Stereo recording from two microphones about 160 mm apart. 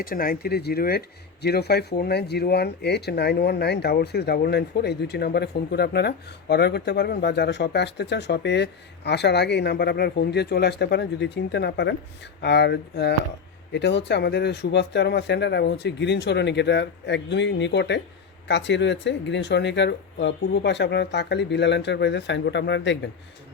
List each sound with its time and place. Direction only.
0.0 s speech: 65° left (ahead or behind); by 23.0 s 90° left